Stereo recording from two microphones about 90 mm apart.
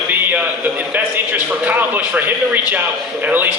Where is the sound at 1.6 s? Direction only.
20° right (ahead or behind).